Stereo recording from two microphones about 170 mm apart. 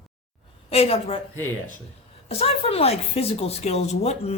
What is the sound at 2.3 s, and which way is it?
A woman's voice, 35° left (ahead or behind).